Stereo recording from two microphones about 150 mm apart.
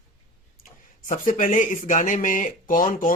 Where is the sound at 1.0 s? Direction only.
60° left (ahead or behind).